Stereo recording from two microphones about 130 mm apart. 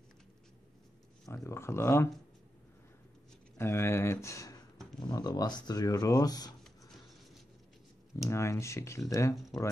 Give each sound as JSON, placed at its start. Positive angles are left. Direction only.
{"t": 1.3, "sound": "speech", "side_deg": 20}
{"t": 3.5, "sound": "speech", "side_deg": 20}
{"t": 8.3, "sound": "speech", "side_deg": 20}